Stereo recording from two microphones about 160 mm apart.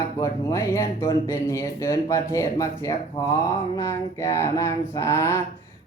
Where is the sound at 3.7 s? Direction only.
20° left (ahead or behind).